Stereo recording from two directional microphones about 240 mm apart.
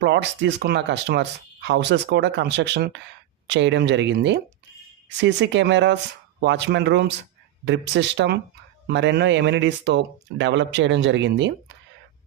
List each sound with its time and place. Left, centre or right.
0.0 s speech: right